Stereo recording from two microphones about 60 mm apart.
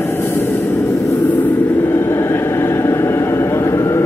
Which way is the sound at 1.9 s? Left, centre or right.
Left.